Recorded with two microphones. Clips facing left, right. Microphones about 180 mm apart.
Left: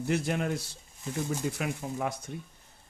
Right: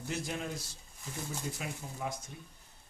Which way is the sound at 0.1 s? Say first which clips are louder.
Left 8 dB; 65° left (ahead or behind).